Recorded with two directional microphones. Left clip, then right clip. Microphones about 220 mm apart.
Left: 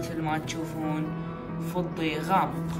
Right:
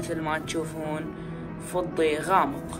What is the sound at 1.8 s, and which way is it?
Speech, 35° left (ahead or behind).